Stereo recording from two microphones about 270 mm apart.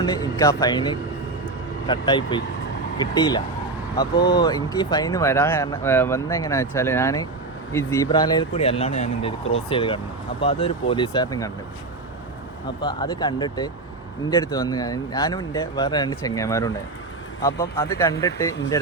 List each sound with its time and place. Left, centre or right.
0.0 s speech: centre
12.8 s speech: centre